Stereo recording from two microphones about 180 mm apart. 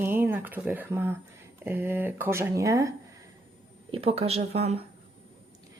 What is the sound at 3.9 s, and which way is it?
Speech, 30° right (ahead or behind).